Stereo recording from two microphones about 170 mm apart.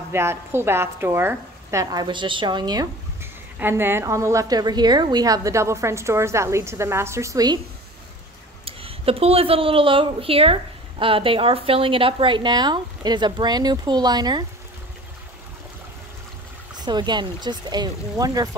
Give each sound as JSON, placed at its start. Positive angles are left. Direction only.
{"t": 0.1, "sound": "a woman's voice", "side_deg": -15}
{"t": 3.5, "sound": "a woman's voice", "side_deg": -15}
{"t": 8.6, "sound": "speech", "side_deg": -35}
{"t": 16.8, "sound": "speech", "side_deg": -25}